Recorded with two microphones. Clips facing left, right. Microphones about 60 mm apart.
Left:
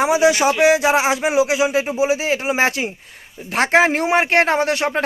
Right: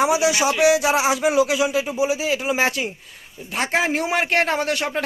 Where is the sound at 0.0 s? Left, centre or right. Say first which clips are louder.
Left 3 dB; left.